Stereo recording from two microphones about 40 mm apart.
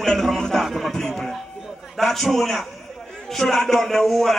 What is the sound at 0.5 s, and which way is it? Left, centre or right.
Speech, centre.